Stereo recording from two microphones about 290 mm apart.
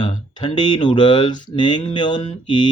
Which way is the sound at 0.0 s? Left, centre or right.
Centre.